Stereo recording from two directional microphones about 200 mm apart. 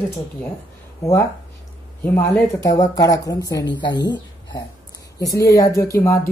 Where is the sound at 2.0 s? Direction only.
15° left (ahead or behind).